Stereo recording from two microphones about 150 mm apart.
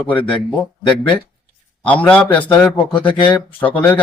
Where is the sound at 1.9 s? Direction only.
10° left (ahead or behind).